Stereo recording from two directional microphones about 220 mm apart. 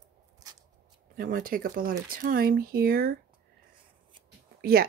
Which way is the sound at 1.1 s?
40° right (ahead or behind).